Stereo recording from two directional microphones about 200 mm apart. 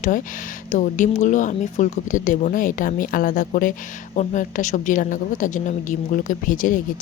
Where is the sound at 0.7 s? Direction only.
40° left (ahead or behind).